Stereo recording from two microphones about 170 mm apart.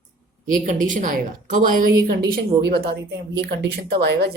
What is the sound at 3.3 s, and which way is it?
Speech, 90° right.